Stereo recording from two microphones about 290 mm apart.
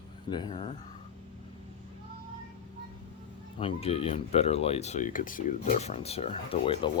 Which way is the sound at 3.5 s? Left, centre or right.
Centre.